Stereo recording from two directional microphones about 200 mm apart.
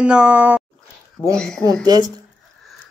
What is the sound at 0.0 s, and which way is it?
Speech, 5° right (ahead or behind).